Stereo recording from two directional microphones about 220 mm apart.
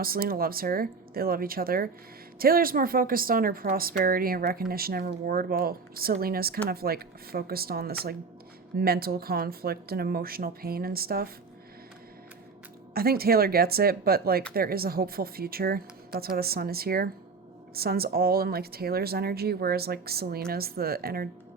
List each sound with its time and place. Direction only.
0.0 s a woman's voice: 40° right (ahead or behind)
12.9 s speech: 45° right (ahead or behind)